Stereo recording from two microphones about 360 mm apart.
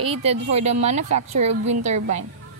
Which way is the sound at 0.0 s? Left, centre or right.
Centre.